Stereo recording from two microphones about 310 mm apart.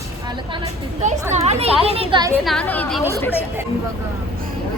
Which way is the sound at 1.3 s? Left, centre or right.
Centre.